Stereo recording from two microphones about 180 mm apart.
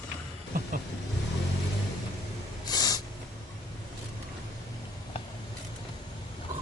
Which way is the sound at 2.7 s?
20° left (ahead or behind).